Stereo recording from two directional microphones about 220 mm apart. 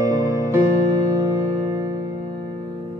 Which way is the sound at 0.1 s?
15° right (ahead or behind).